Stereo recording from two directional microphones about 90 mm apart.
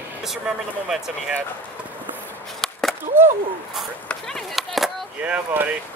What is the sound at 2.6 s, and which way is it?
Skateboard, 5° left (ahead or behind).